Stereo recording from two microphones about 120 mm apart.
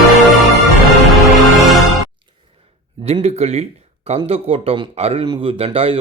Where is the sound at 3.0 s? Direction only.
60° right (ahead or behind).